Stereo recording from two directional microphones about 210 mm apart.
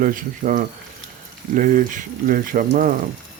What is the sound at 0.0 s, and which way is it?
Speech, 40° right (ahead or behind).